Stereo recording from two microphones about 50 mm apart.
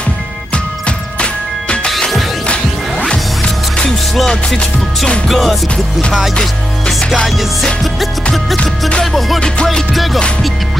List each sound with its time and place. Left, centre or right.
0.8 s music: centre
1.9 s music: centre
3.1 s music: centre
5.3 s music: centre